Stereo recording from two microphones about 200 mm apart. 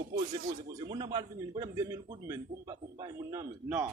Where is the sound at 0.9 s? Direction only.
20° right (ahead or behind).